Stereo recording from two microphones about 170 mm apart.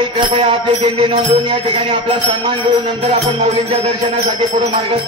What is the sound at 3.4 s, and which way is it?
Music, 40° right (ahead or behind).